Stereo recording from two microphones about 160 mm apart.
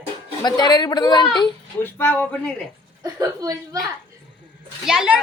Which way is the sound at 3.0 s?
20° right (ahead or behind).